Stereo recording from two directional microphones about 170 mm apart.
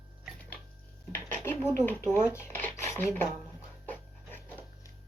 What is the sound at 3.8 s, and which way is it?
Dog, 10° left (ahead or behind).